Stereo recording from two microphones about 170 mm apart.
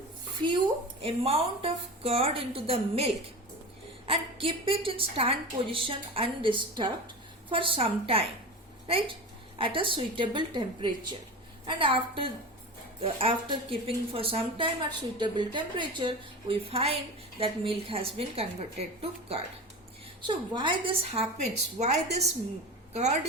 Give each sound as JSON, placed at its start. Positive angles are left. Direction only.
{"t": 1.0, "sound": "a woman's voice", "side_deg": -35}
{"t": 20.2, "sound": "a woman's voice", "side_deg": -30}